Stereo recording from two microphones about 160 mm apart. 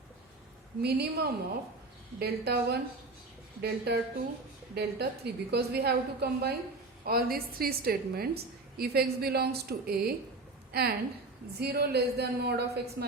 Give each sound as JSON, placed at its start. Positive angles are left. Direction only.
{"t": 0.8, "sound": "a woman's voice", "side_deg": -90}
{"t": 7.0, "sound": "a woman's voice", "side_deg": -75}